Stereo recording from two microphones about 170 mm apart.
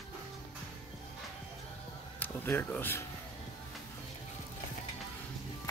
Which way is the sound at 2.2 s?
10° left (ahead or behind).